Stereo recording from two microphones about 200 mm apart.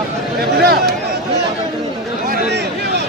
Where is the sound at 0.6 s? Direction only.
50° right (ahead or behind).